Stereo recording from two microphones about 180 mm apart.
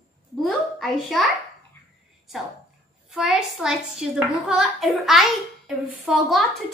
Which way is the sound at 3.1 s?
Centre (ahead or behind).